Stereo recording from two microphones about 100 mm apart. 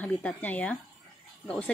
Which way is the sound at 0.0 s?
15° left (ahead or behind).